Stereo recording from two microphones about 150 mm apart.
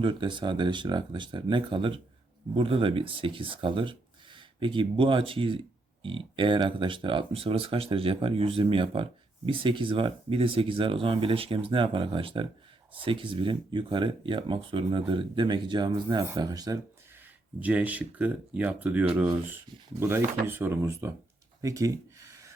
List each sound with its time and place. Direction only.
0.0 s speech: 35° right (ahead or behind)
17.6 s speech: 10° right (ahead or behind)
21.6 s a sound: 20° right (ahead or behind)